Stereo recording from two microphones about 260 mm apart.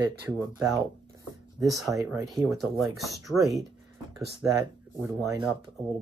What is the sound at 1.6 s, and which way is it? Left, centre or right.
Speech, centre.